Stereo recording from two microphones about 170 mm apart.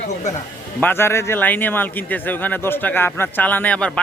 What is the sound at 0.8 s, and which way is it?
Speech, 15° left (ahead or behind).